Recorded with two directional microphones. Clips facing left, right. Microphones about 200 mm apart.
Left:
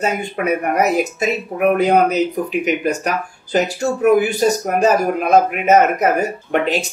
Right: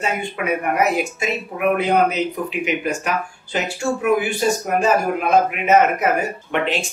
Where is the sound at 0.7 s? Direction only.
40° left (ahead or behind).